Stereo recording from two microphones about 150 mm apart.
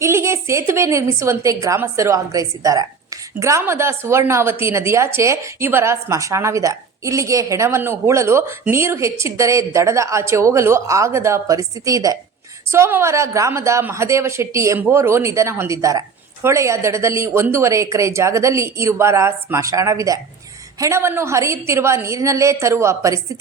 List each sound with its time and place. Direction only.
0.0 s a woman's voice: 20° right (ahead or behind)